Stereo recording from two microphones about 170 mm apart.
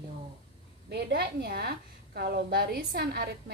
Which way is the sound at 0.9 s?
70° right (ahead or behind).